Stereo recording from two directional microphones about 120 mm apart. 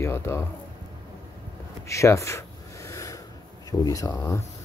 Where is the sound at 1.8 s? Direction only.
25° left (ahead or behind).